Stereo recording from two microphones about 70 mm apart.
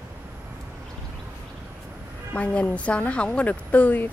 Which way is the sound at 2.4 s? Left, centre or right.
Centre.